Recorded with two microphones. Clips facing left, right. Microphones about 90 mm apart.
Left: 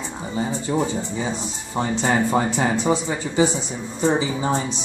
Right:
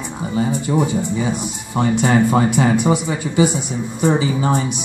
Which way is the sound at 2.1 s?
Centre (ahead or behind).